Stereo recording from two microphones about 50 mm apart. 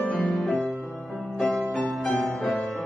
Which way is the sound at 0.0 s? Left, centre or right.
Left.